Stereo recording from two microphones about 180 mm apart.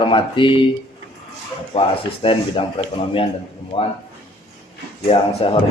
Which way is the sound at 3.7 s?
30° left (ahead or behind).